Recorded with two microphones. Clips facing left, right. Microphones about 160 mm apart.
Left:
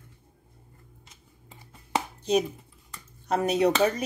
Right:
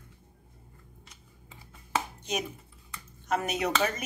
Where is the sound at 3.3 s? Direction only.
35° left (ahead or behind).